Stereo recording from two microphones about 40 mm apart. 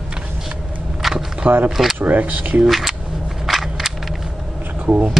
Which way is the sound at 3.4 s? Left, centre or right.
Centre.